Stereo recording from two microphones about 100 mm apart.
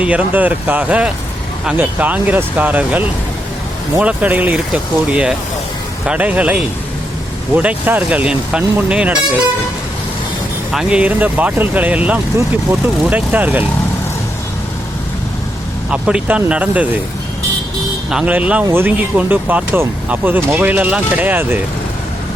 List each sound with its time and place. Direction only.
0.0 s speech: 15° right (ahead or behind)
10.7 s speech: 5° right (ahead or behind)
15.9 s speech: 10° right (ahead or behind)
18.1 s speech: 10° right (ahead or behind)